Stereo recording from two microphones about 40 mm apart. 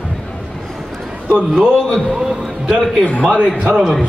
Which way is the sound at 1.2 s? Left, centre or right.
Right.